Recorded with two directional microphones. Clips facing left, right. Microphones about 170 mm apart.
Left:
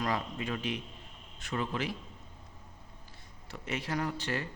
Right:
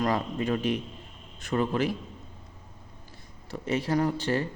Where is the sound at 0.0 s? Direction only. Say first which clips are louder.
Right 6 dB; 40° right (ahead or behind).